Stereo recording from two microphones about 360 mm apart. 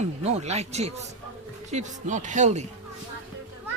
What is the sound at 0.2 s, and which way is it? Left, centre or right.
Speech, centre.